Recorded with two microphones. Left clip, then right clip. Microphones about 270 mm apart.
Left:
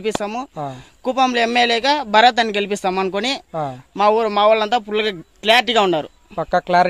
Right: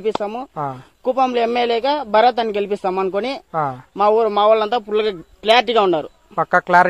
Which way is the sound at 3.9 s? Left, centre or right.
Left.